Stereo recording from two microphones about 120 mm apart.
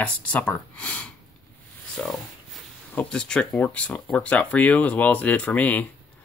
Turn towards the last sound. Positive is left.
turn(degrees=15)  # may be behind; listen again after turning